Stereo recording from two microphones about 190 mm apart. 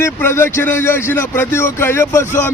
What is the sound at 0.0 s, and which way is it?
A man's voice, 10° left (ahead or behind).